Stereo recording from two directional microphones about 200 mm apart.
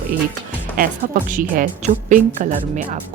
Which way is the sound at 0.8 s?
45° right (ahead or behind).